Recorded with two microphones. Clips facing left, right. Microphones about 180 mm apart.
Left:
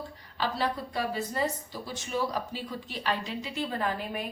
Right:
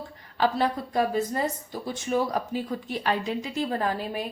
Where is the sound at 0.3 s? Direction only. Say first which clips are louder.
Right 6 dB; 50° right (ahead or behind).